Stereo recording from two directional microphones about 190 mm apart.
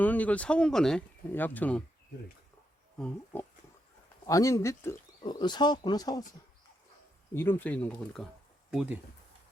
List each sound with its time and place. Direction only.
0.0 s speech: 10° left (ahead or behind)
3.0 s speech: centre (ahead or behind)
4.3 s speech: 15° left (ahead or behind)
7.3 s speech: 10° left (ahead or behind); by 9.0 s 5° right (ahead or behind)